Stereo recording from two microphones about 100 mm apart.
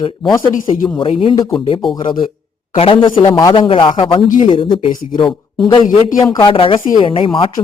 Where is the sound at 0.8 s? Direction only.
60° left (ahead or behind).